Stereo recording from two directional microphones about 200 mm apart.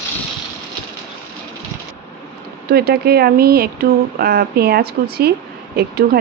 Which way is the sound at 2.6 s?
50° right (ahead or behind).